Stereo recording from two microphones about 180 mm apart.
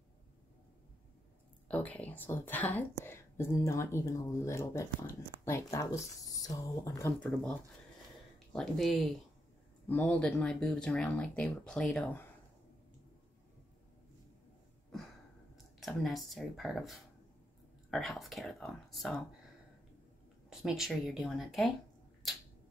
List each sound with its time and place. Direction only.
1.7 s a woman's voice: 10° left (ahead or behind)
8.5 s a woman's voice: centre (ahead or behind)
14.9 s a sound: centre (ahead or behind)
17.8 s a woman's voice: centre (ahead or behind)
20.4 s a woman's voice: 5° right (ahead or behind)